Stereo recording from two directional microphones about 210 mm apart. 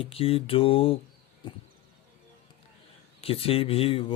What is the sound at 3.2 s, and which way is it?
Speech, 25° left (ahead or behind).